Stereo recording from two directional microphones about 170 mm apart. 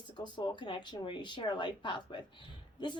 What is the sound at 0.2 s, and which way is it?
A woman's voice, 25° left (ahead or behind).